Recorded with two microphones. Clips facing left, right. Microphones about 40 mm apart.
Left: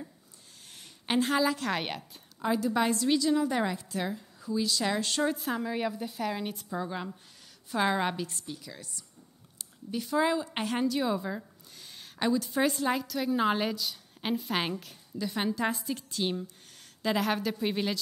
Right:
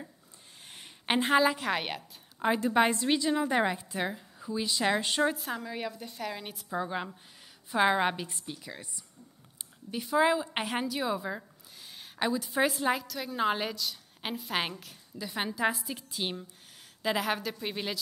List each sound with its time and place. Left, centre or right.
0.7 s a sound: right
1.7 s a woman's voice: centre
2.4 s a woman's voice: right
5.3 s a woman's voice: centre
6.7 s a woman's voice: centre
9.6 s a sound: centre
10.1 s a woman's voice: centre